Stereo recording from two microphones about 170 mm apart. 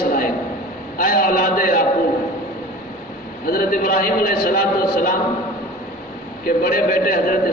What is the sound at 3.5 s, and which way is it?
A man's voice, 60° left (ahead or behind).